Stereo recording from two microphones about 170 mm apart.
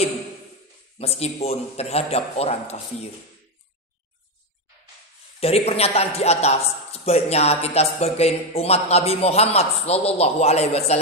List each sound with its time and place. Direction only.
0.9 s speech: 35° left (ahead or behind)
5.4 s speech: 35° left (ahead or behind)